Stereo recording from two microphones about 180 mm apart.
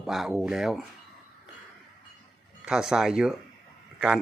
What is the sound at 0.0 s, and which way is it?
Speech, centre (ahead or behind).